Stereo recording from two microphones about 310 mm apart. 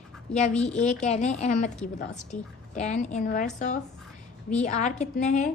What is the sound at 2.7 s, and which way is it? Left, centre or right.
A woman's voice, left.